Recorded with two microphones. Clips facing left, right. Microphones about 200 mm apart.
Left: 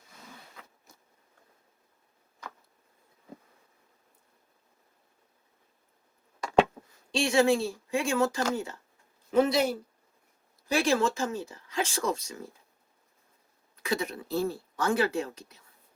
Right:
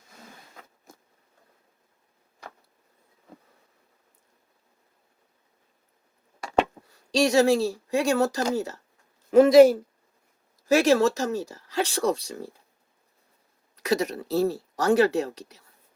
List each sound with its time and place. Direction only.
0.6 s a sound: 45° right (ahead or behind)
7.1 s speech: 40° right (ahead or behind)
13.7 s speech: 40° right (ahead or behind)